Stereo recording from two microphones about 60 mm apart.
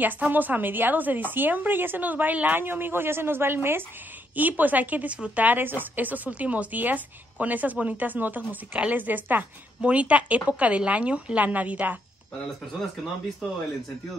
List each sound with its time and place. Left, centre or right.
0.0 s a woman's voice: right
4.4 s a woman's voice: right